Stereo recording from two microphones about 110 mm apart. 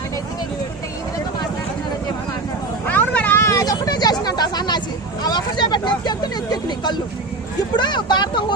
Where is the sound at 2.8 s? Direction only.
15° left (ahead or behind); by 4.8 s 40° left (ahead or behind).